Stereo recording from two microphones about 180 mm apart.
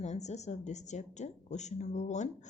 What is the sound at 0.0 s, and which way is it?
A woman's voice, 40° left (ahead or behind).